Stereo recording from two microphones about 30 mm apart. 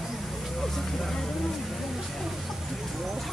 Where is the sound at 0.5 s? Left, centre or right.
Centre.